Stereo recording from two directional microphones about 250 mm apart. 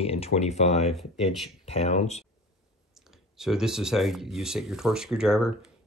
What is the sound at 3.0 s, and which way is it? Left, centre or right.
Speech, centre.